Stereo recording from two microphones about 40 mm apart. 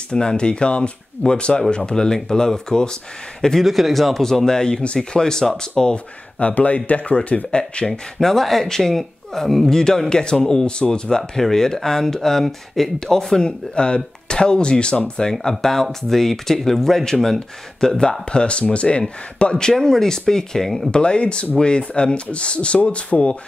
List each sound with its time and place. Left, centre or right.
0.1 s speech: left
3.6 s speech: centre
6.4 s speech: left
7.8 s speech: centre
15.4 s speech: centre
18.3 s speech: left
19.5 s speech: centre
20.9 s speech: left